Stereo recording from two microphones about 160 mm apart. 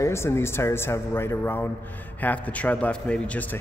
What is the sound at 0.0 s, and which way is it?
A man's voice, 15° left (ahead or behind).